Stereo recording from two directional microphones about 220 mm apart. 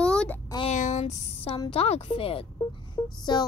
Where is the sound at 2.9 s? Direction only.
20° left (ahead or behind).